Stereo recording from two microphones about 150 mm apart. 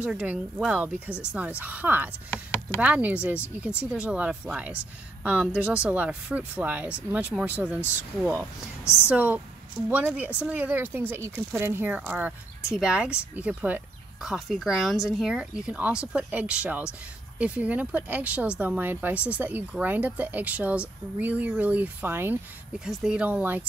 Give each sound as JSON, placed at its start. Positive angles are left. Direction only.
{"t": 0.0, "sound": "speech", "side_deg": -10}
{"t": 2.3, "sound": "a sound", "side_deg": 15}
{"t": 2.8, "sound": "speech", "side_deg": -10}
{"t": 8.8, "sound": "speech", "side_deg": 15}
{"t": 9.1, "sound": "speech", "side_deg": -10}